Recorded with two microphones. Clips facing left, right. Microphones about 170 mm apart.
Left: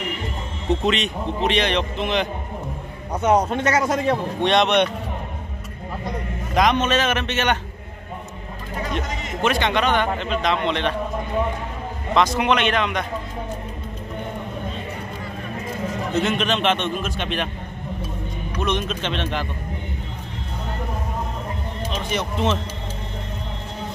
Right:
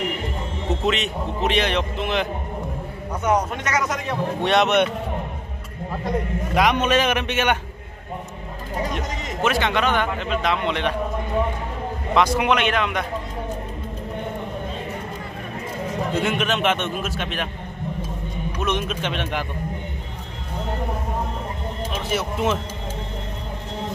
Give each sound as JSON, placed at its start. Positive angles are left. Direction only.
{"t": 0.8, "sound": "a man's voice", "side_deg": -5}
{"t": 3.1, "sound": "a man's voice", "side_deg": 30}
{"t": 4.4, "sound": "a man's voice", "side_deg": -5}
{"t": 6.5, "sound": "a man's voice", "side_deg": -10}
{"t": 8.9, "sound": "a man's voice", "side_deg": -5}
{"t": 12.1, "sound": "a man's voice", "side_deg": -10}
{"t": 16.1, "sound": "a man's voice", "side_deg": -10}
{"t": 18.6, "sound": "a man's voice", "side_deg": -10}
{"t": 21.9, "sound": "speech", "side_deg": -10}